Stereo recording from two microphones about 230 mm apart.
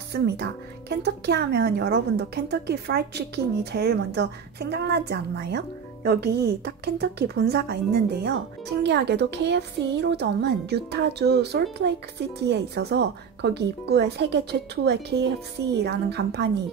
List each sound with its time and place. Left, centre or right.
0.1 s a woman's voice: right